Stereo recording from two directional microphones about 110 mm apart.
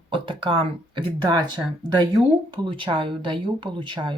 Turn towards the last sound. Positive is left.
turn(degrees=-45)  # may be behind; listen again after turning